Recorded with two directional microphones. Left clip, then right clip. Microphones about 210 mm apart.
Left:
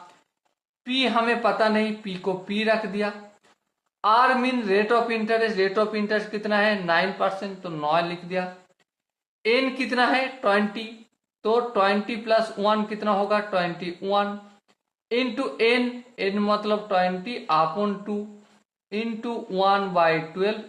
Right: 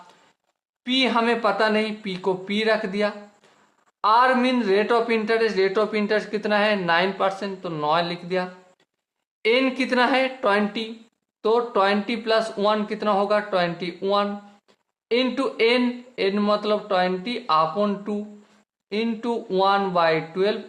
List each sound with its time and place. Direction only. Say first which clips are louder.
0.9 s speech: right 2 dB; 30° right (ahead or behind)